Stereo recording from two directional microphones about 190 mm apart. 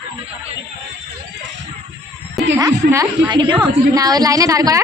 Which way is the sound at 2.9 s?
15° right (ahead or behind).